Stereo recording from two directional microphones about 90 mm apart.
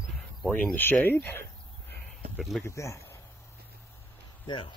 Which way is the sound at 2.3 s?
Centre (ahead or behind).